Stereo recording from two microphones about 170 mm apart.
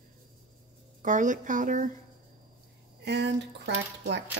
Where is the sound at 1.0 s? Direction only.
50° right (ahead or behind).